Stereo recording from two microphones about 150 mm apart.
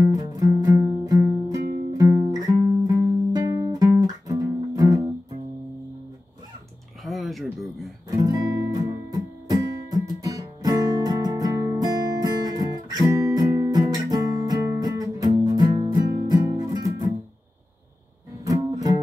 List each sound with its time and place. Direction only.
0.0 s music: 25° right (ahead or behind)
7.0 s a sound: centre (ahead or behind)
8.1 s music: 20° right (ahead or behind)
18.4 s music: 25° right (ahead or behind)